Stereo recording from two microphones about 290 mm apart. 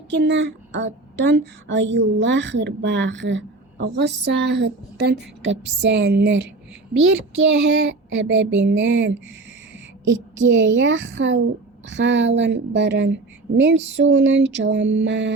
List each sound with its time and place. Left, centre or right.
0.1 s a woman's voice: right
6.9 s a child's voice: right
7.7 s a woman's voice: right